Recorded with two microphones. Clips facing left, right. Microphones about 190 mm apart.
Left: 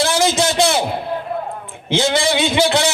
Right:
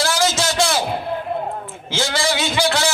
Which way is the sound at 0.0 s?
20° left (ahead or behind).